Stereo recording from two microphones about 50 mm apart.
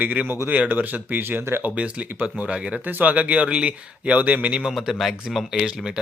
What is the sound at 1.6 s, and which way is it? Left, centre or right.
Speech, right.